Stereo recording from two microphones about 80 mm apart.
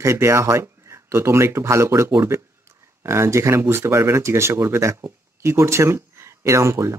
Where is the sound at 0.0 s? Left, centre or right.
Right.